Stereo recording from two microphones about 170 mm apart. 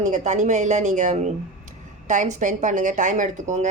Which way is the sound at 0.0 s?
45° right (ahead or behind).